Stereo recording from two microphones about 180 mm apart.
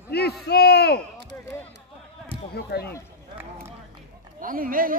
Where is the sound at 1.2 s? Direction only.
70° right (ahead or behind).